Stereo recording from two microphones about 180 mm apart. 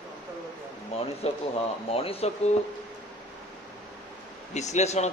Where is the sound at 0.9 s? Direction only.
35° left (ahead or behind).